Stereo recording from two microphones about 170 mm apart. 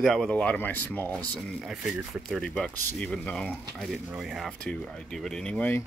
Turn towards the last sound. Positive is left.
turn(degrees=10)  # may be behind; listen again after turning